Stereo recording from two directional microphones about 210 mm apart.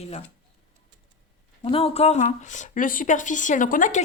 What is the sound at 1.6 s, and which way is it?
Speech, 25° left (ahead or behind).